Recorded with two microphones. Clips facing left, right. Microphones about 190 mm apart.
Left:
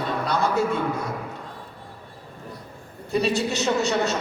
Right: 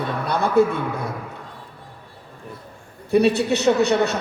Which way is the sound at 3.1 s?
60° right (ahead or behind).